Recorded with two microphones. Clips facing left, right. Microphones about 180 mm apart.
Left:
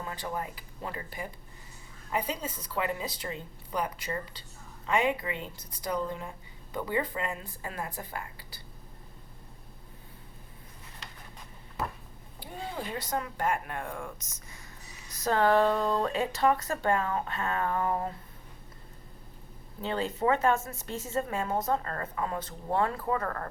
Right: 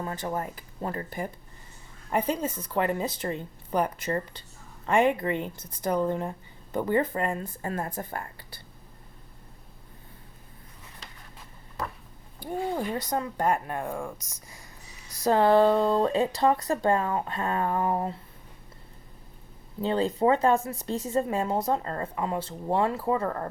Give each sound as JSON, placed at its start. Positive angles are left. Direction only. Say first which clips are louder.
{"t": 0.0, "sound": "a woman's voice", "louder": "right 4 dB", "side_deg": -40}
{"t": 12.4, "sound": "a sound", "louder": "right 11 dB", "side_deg": -45}
{"t": 13.1, "sound": "speech", "louder": "right 3 dB", "side_deg": -35}
{"t": 19.8, "sound": "speech", "louder": "right 5 dB", "side_deg": -35}